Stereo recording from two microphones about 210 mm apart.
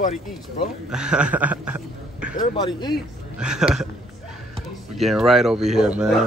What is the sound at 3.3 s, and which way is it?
Speech, 5° right (ahead or behind).